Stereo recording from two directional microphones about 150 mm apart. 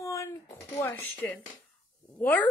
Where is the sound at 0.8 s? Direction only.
20° left (ahead or behind).